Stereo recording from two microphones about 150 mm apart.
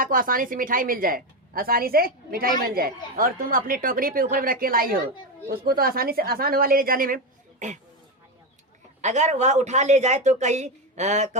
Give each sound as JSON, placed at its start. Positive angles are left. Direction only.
{"t": 0.0, "sound": "a woman's voice", "side_deg": -70}
{"t": 3.2, "sound": "a woman's voice", "side_deg": -70}
{"t": 9.0, "sound": "speech", "side_deg": -50}